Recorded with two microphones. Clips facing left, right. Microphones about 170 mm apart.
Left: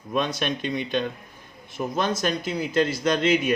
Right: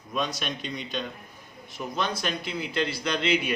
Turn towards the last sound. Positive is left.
turn(degrees=45)  # may be behind; listen again after turning